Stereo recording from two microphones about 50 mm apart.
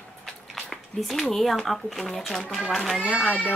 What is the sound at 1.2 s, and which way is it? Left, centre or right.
Speech, centre.